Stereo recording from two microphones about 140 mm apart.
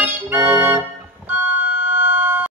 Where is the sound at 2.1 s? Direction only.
15° right (ahead or behind).